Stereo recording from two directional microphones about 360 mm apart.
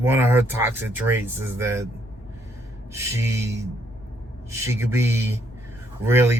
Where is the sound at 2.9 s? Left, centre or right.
Centre.